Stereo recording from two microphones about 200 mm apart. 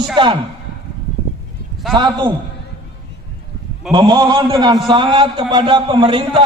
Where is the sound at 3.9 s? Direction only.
20° right (ahead or behind).